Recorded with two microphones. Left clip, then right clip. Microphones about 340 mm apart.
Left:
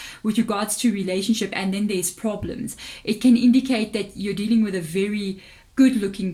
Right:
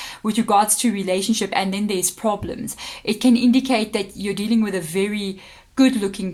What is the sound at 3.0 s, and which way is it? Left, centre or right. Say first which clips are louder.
Speech: right 1 dB; centre.